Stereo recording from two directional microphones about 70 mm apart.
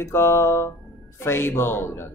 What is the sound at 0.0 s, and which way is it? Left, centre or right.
A man's voice, left.